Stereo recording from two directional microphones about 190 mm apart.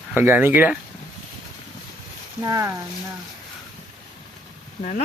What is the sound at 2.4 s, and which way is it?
Speech, 15° right (ahead or behind).